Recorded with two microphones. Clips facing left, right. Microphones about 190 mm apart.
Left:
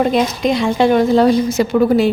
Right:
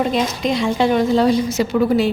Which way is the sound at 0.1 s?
55° left (ahead or behind).